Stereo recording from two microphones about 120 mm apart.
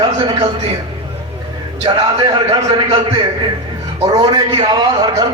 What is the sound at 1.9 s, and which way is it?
Speech, 45° right (ahead or behind).